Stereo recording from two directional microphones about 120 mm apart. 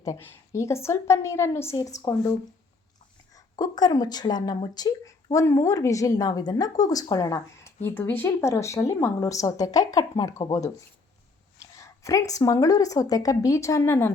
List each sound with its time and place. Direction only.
0.2 s speech: 20° left (ahead or behind)
3.3 s speech: 30° left (ahead or behind)
7.9 s speech: 15° left (ahead or behind)